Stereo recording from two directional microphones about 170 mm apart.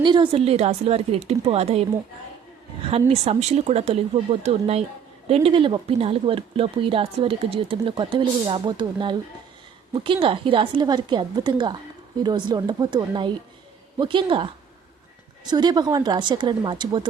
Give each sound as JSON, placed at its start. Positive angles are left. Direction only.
{"t": 0.0, "sound": "speech", "side_deg": -30}
{"t": 2.8, "sound": "a woman's voice", "side_deg": -35}